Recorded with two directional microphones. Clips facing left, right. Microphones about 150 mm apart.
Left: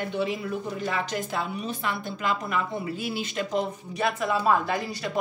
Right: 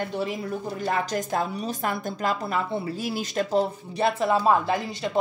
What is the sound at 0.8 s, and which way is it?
A woman's voice, 40° right (ahead or behind).